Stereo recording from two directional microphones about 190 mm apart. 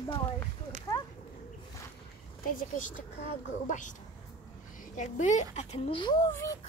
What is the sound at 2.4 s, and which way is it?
Speech, 45° left (ahead or behind).